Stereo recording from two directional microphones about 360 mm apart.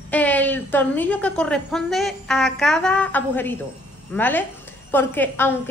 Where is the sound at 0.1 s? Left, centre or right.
Centre.